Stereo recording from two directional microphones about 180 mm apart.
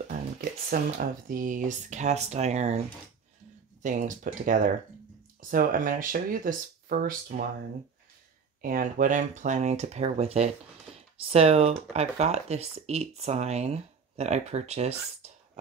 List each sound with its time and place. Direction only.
0.4 s speech: 50° right (ahead or behind)
3.8 s speech: 45° right (ahead or behind)
8.5 s speech: 50° right (ahead or behind)